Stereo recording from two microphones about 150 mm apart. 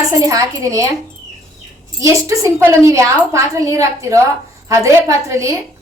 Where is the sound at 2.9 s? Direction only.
20° right (ahead or behind).